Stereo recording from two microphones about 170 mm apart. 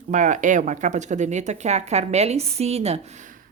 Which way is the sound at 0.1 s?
45° right (ahead or behind).